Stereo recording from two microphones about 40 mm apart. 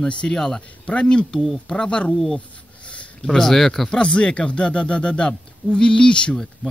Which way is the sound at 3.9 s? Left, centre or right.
Left.